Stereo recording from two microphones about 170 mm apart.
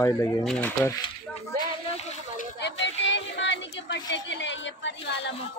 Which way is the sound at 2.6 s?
90° left.